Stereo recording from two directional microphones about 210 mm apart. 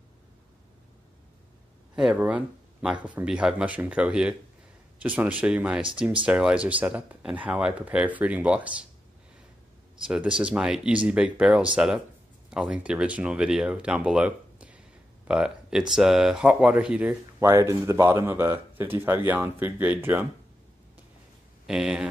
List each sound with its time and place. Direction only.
2.0 s speech: 5° right (ahead or behind)
10.0 s speech: 5° right (ahead or behind)
21.6 s speech: 5° right (ahead or behind)